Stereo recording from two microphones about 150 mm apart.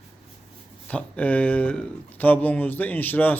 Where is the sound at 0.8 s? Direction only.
10° left (ahead or behind).